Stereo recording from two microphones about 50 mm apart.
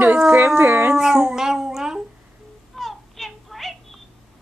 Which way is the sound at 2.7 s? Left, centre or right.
Centre.